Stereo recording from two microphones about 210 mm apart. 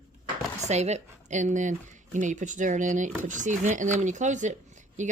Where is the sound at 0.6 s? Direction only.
30° right (ahead or behind).